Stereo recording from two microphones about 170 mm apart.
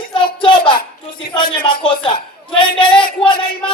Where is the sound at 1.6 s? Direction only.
30° left (ahead or behind).